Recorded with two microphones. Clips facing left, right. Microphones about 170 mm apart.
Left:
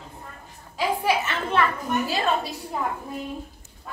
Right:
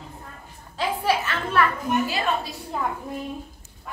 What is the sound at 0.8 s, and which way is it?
Speech, 20° left (ahead or behind).